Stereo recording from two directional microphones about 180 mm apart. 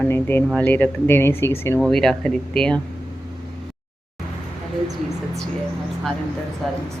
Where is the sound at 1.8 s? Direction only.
Centre (ahead or behind).